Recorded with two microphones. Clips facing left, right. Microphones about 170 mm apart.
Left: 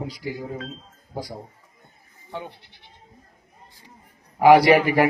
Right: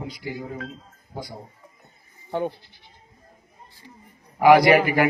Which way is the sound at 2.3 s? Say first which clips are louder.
Right 8 dB; 50° right (ahead or behind).